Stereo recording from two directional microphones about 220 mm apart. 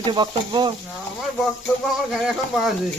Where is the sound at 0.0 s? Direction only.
20° right (ahead or behind).